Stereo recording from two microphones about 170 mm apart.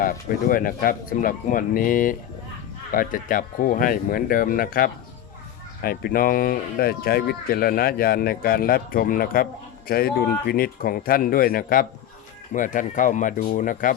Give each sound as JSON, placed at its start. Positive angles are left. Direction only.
{"t": 0.0, "sound": "speech", "side_deg": 55}